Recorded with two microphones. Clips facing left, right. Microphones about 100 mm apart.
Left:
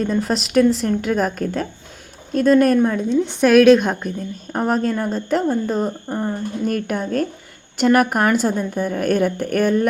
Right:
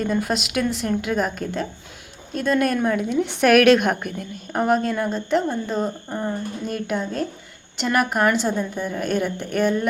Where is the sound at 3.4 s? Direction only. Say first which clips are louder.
Left 3 dB; 20° left (ahead or behind).